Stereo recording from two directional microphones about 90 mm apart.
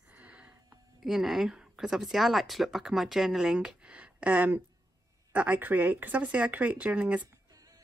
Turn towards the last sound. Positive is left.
turn(degrees=-15)  # may be behind; listen again after turning